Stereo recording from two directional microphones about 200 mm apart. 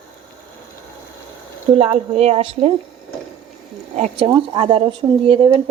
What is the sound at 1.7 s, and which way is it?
Speech, 30° right (ahead or behind).